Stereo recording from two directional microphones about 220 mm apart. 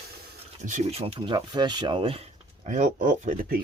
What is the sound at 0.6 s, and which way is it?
Speech, 35° right (ahead or behind).